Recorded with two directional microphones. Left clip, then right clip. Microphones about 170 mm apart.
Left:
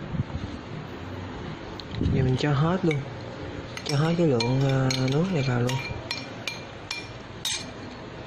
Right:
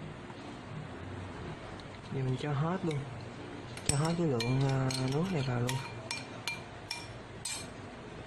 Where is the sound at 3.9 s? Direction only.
10° left (ahead or behind).